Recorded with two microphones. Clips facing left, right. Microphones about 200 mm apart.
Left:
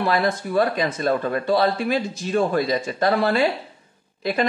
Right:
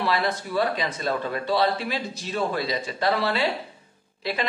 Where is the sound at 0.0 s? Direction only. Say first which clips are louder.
Left 4 dB; 50° left (ahead or behind).